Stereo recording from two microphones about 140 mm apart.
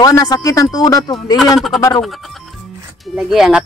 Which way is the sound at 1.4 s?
Centre (ahead or behind).